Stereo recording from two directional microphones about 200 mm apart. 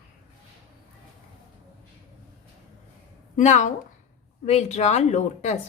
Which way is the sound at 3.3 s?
35° left (ahead or behind).